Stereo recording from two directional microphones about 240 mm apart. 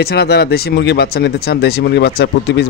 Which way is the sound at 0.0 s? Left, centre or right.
Left.